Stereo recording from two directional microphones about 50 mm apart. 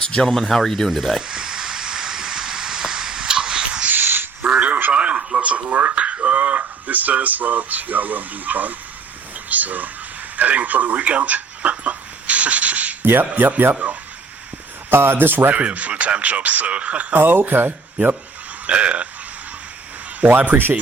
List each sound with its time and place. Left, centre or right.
0.3 s speech: centre
1.3 s a sound: centre
3.8 s a sound: right
4.5 s a sound: right
9.5 s speech: right
10.3 s a sound: right
13.1 s speech: right
14.8 s speech: right
15.5 s speech: right
17.2 s speech: right
18.6 s speech: right
20.2 s speech: right